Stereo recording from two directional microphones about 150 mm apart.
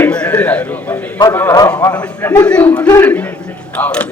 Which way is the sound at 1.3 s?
15° left (ahead or behind).